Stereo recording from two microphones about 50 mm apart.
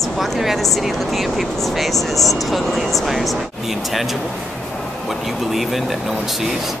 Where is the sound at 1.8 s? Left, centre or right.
Centre.